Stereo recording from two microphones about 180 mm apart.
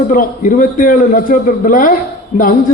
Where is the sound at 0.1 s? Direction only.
50° left (ahead or behind).